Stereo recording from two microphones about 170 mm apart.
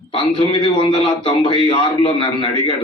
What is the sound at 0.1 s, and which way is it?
A man's voice, 30° left (ahead or behind).